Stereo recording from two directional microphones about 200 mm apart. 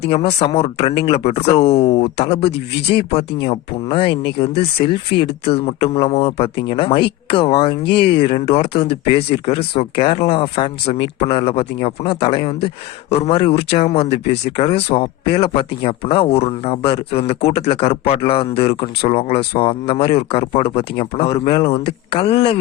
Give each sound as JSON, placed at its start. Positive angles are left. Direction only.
{"t": 0.1, "sound": "speech", "side_deg": 30}